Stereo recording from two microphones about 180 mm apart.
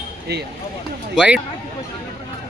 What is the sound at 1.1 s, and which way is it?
Speech, 5° right (ahead or behind).